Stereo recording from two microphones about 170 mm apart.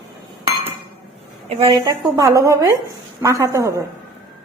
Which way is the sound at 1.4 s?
35° right (ahead or behind).